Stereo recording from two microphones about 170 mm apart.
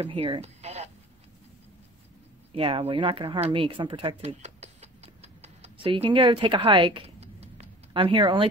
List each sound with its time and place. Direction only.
0.0 s speech: 30° right (ahead or behind)
2.5 s speech: 35° right (ahead or behind)